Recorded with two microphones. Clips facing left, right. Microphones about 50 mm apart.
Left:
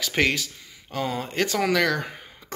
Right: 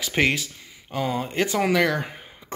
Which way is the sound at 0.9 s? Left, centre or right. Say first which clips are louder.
Right 2 dB; centre.